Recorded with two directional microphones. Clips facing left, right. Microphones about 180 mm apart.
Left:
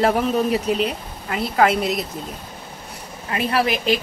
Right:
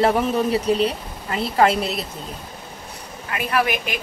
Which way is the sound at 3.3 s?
30° left (ahead or behind).